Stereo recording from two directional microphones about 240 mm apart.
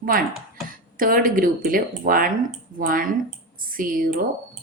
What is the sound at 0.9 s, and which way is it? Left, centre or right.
A woman's voice, right.